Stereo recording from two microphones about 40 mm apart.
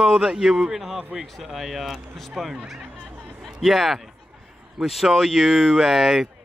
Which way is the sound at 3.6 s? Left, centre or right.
Centre.